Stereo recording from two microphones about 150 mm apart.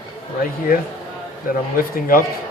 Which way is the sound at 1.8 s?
70° left (ahead or behind).